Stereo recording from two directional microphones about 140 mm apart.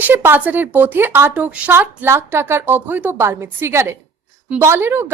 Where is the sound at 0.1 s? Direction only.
15° right (ahead or behind).